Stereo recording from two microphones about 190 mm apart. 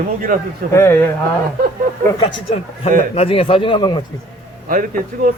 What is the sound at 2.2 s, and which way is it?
A man's voice, 25° left (ahead or behind).